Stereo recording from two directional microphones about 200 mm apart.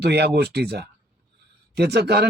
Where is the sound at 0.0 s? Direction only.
55° right (ahead or behind).